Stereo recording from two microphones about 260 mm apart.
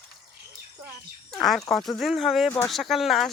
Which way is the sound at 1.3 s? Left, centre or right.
Centre.